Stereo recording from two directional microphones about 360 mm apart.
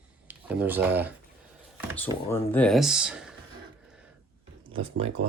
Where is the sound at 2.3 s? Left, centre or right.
Centre.